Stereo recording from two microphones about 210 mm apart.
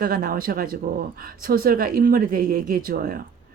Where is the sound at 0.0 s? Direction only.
40° right (ahead or behind).